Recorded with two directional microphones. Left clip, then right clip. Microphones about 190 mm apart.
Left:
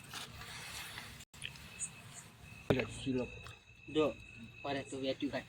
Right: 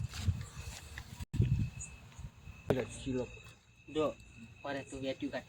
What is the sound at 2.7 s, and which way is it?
Speech, 5° right (ahead or behind).